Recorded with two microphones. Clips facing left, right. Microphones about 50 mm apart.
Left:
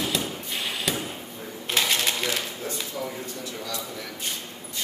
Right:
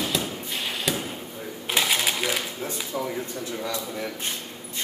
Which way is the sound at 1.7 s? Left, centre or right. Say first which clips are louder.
Right 1 dB; centre.